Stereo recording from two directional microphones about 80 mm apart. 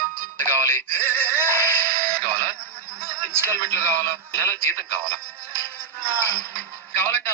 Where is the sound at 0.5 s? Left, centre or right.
Right.